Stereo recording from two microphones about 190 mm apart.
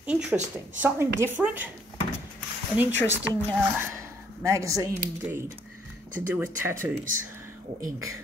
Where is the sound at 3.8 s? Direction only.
15° right (ahead or behind).